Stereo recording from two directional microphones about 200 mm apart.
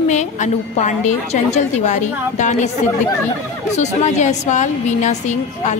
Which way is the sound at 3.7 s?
35° left (ahead or behind).